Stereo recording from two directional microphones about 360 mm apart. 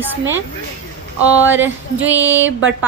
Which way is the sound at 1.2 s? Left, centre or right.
Centre.